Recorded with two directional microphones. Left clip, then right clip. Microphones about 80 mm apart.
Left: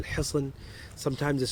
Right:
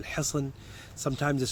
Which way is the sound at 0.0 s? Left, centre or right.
Right.